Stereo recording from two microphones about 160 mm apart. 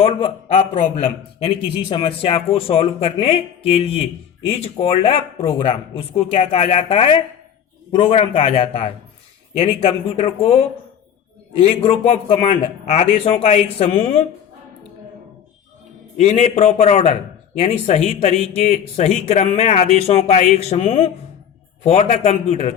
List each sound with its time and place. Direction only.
0.2 s speech: 35° left (ahead or behind)
11.8 s speech: 35° left (ahead or behind)
16.1 s speech: 45° left (ahead or behind)